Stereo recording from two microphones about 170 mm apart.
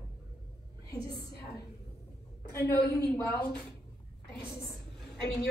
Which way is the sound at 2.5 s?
15° left (ahead or behind).